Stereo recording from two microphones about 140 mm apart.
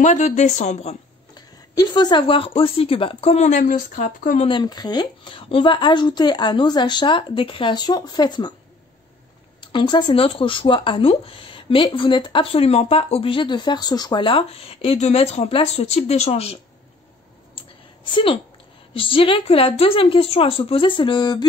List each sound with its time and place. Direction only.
0.0 s speech: 60° left (ahead or behind)
1.3 s speech: 30° left (ahead or behind); by 4.4 s 75° left (ahead or behind)
4.5 s speech: 30° left (ahead or behind)
9.6 s speech: 35° left (ahead or behind)
18.1 s speech: 35° left (ahead or behind)